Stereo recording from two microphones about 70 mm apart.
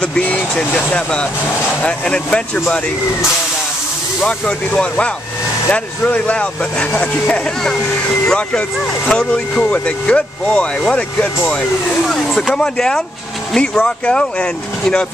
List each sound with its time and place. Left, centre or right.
0.0 s speech: centre
4.3 s speech: centre